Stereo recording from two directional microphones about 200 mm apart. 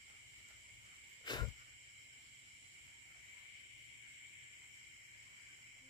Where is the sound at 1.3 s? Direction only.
20° left (ahead or behind).